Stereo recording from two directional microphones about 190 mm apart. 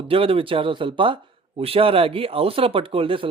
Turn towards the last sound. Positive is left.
turn(degrees=-30)  # may be behind; listen again after turning